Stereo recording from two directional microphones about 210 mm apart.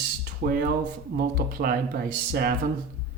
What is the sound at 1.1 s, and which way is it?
Speech, 45° right (ahead or behind).